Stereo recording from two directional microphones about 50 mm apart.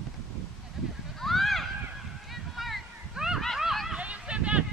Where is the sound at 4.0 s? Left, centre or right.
Right.